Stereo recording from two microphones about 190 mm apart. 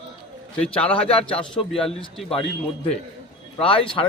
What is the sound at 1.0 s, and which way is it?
Speech, 30° left (ahead or behind).